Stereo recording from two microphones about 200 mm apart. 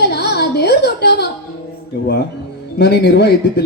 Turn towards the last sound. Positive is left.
turn(degrees=55)  # may be behind; listen again after turning